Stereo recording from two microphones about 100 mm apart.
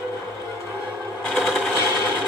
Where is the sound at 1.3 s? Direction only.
Centre (ahead or behind).